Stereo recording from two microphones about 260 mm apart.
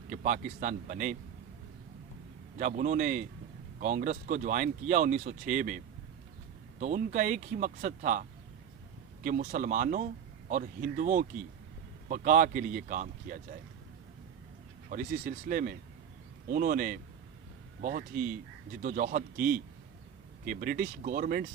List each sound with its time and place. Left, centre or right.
0.1 s speech: right
2.6 s speech: right
14.8 s speech: right